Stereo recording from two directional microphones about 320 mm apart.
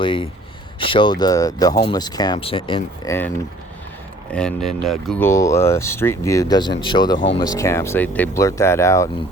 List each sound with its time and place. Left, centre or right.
0.0 s speech: centre
4.3 s speech: centre